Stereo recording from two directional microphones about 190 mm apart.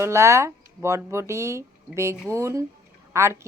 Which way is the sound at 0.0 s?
15° right (ahead or behind).